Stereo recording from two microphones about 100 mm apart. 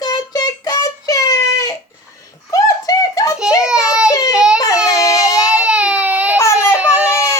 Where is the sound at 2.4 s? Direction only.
35° left (ahead or behind).